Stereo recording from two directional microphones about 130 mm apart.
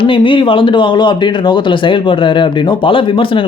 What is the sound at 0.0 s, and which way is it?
Speech, 40° left (ahead or behind).